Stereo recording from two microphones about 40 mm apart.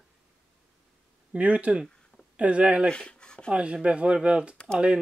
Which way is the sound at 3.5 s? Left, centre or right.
Right.